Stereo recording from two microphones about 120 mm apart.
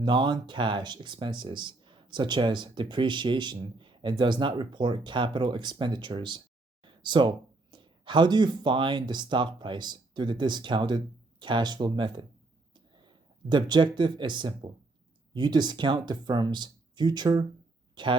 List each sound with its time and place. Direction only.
0.0 s speech: 40° right (ahead or behind)